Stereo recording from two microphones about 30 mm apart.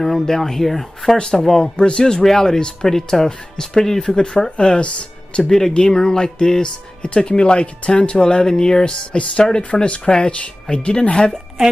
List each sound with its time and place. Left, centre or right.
0.0 s speech: centre
1.1 s speech: left
2.2 s speech: centre
4.6 s speech: left
5.7 s speech: left
8.5 s speech: left